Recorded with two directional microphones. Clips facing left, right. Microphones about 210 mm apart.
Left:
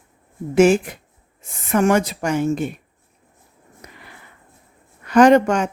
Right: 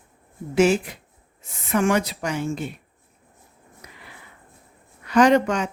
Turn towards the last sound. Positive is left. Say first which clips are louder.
# left 4 dB
turn(degrees=50)  # may be behind; listen again after turning